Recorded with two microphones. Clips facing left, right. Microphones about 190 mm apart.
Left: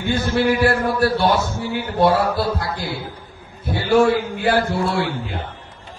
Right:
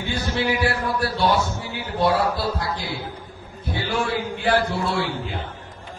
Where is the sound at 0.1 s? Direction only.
50° left (ahead or behind).